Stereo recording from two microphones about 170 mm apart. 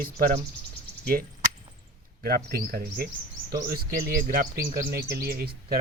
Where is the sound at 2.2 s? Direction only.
60° right (ahead or behind).